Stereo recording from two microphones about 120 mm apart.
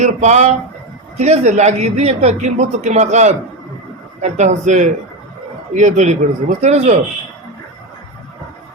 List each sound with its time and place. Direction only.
0.0 s a woman's voice: 70° right (ahead or behind); by 6.1 s 90° right
6.6 s a woman's voice: 65° right (ahead or behind)